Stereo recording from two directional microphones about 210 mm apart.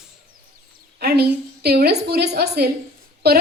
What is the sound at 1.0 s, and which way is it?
A woman's voice, 50° right (ahead or behind).